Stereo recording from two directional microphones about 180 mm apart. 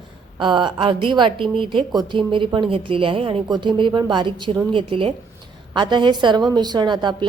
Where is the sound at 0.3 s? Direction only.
25° right (ahead or behind).